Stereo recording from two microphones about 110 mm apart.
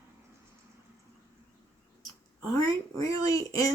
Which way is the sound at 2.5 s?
30° left (ahead or behind).